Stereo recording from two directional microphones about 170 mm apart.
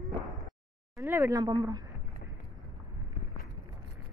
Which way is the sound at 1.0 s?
15° right (ahead or behind).